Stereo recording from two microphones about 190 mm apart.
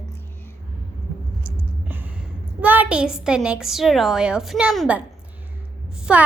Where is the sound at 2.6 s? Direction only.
10° right (ahead or behind).